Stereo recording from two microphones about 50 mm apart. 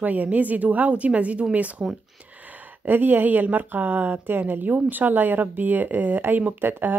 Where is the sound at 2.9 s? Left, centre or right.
Right.